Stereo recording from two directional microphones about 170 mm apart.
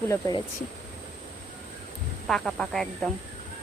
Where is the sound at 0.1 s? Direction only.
20° left (ahead or behind).